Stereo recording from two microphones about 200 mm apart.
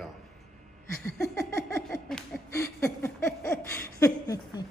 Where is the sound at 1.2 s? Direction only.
15° left (ahead or behind).